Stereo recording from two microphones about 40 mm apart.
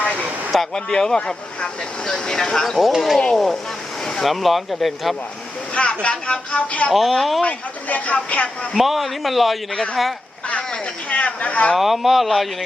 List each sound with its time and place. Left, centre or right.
0.7 s speech: centre
2.7 s speech: centre
5.7 s speech: left
6.9 s speech: centre
7.4 s speech: left
8.7 s speech: centre
11.1 s speech: left
11.7 s speech: centre